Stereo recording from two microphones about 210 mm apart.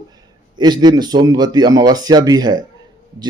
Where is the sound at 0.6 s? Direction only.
20° right (ahead or behind).